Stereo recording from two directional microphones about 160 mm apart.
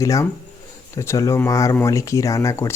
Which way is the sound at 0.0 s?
20° left (ahead or behind).